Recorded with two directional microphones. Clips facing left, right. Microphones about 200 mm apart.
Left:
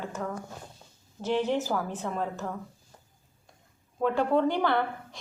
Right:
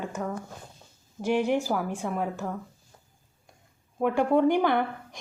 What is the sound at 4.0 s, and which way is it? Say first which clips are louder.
A woman's voice: right 2 dB; 15° right (ahead or behind).